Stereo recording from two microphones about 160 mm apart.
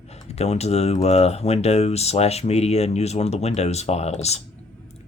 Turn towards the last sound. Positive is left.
turn(degrees=45)  # may be behind; listen again after turning